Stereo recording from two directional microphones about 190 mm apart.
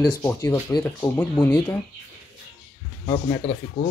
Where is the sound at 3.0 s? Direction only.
20° left (ahead or behind).